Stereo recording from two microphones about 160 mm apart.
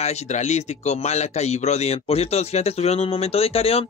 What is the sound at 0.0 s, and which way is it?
Speech, 45° left (ahead or behind).